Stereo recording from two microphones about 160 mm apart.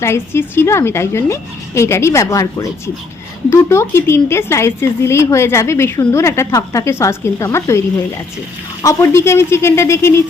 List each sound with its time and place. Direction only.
0.0 s speech: 15° left (ahead or behind)
8.8 s speech: 20° left (ahead or behind)